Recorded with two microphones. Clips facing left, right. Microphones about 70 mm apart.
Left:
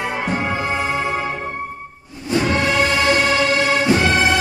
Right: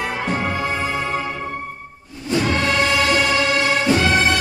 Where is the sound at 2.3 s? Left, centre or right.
Centre.